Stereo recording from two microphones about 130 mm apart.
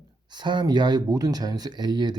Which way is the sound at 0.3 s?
35° right (ahead or behind).